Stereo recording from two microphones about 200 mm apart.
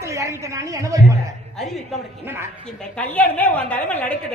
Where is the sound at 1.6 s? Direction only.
Centre (ahead or behind).